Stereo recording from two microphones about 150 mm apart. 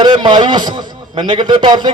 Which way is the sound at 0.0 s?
30° right (ahead or behind).